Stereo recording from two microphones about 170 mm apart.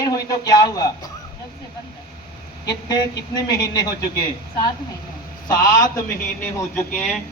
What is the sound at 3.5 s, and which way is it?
Speech, 20° left (ahead or behind).